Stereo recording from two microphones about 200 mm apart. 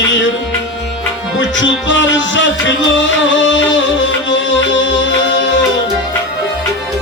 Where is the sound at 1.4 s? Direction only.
65° left (ahead or behind).